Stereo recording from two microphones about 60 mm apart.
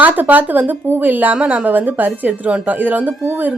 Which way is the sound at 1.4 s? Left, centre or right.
Centre.